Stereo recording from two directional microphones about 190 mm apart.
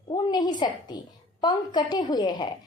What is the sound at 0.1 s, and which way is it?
A woman's voice, 20° left (ahead or behind).